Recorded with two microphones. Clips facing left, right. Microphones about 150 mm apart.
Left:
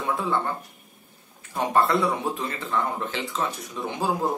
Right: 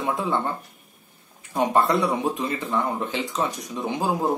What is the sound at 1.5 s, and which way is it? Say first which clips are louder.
Speech: right 2 dB; 15° right (ahead or behind).